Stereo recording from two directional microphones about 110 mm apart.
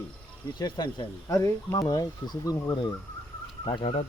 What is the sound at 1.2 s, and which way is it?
Speech, 30° left (ahead or behind).